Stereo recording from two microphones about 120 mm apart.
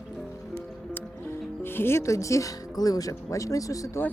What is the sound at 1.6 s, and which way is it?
Speech, 20° left (ahead or behind).